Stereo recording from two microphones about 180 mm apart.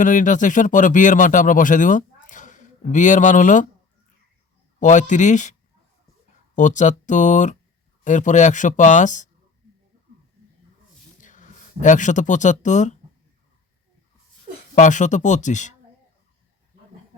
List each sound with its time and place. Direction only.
0.0 s speech: 45° left (ahead or behind)
4.8 s speech: 45° left (ahead or behind)
6.6 s speech: 45° left (ahead or behind)
11.2 s speech: 45° left (ahead or behind)
14.8 s speech: 45° left (ahead or behind)